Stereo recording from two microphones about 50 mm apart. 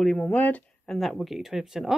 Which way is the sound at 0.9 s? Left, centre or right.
Centre.